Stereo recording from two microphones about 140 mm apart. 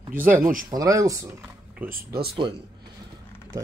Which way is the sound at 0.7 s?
25° right (ahead or behind).